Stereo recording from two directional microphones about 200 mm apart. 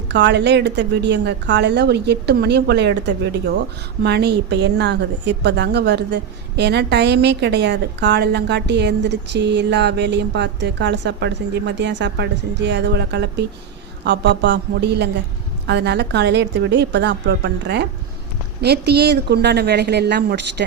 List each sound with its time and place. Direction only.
0.1 s a woman's voice: 60° right (ahead or behind)